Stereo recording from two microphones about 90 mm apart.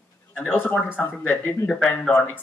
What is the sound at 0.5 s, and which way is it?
Speech, 20° left (ahead or behind).